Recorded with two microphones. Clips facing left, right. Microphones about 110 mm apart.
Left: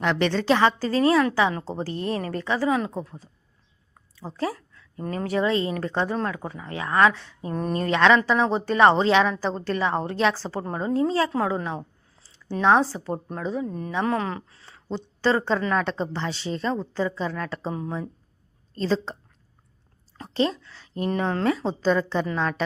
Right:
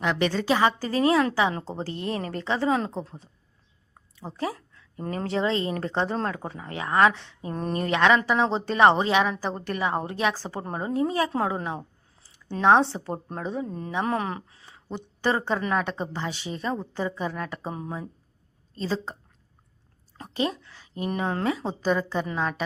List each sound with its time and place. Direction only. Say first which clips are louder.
0.0 s a woman's voice: left 2 dB; 10° right (ahead or behind)
18.8 s a woman's voice: left 4 dB; 10° right (ahead or behind)
20.1 s a sound: left 3 dB; 15° right (ahead or behind)
21.1 s a woman's voice: left 3 dB; 15° right (ahead or behind)